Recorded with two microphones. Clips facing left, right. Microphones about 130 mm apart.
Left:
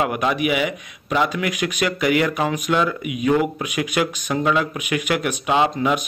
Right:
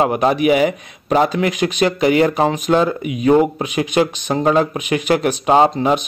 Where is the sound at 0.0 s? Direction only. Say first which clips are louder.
Right 6 dB; 35° right (ahead or behind).